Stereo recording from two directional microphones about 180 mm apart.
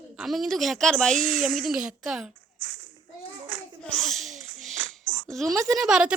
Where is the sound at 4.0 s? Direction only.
Centre (ahead or behind).